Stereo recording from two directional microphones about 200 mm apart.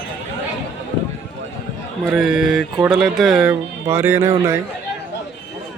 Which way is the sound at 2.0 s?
Centre (ahead or behind).